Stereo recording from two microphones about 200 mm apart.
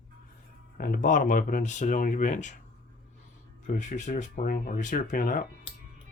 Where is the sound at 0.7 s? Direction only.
45° left (ahead or behind).